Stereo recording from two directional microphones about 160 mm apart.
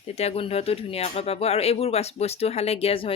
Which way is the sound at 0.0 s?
40° left (ahead or behind).